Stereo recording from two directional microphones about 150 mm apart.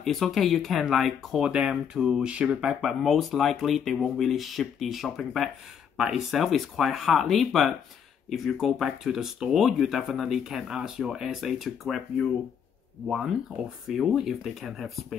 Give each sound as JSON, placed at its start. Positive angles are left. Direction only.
{"t": 0.0, "sound": "speech", "side_deg": 0}